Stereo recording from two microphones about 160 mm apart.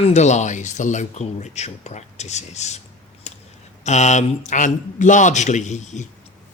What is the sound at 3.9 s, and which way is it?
Speech, 45° left (ahead or behind).